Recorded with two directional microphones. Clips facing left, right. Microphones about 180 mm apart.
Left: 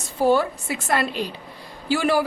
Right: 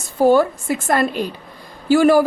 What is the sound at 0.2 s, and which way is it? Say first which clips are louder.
A woman's voice: right 5 dB; 45° right (ahead or behind).